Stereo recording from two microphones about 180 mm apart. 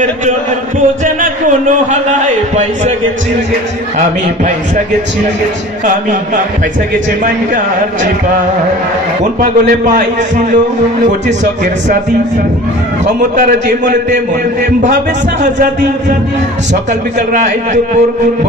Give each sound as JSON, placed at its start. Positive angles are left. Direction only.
{"t": 1.9, "sound": "a man's voice", "side_deg": -40}
{"t": 9.4, "sound": "a man's voice", "side_deg": -45}
{"t": 13.0, "sound": "a man's voice", "side_deg": -45}